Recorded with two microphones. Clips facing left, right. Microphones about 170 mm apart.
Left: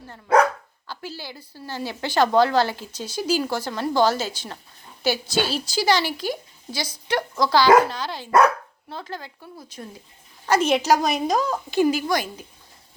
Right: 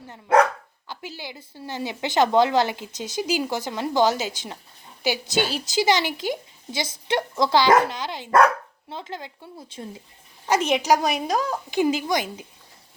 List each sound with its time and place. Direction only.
0.9 s a woman's voice: 20° right (ahead or behind)